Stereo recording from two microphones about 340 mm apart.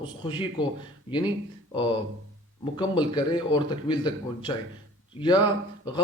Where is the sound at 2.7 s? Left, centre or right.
Centre.